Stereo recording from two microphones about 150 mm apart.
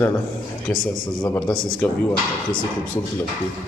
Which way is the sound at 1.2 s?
20° left (ahead or behind).